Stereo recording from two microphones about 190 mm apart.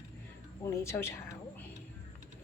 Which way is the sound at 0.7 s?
15° left (ahead or behind).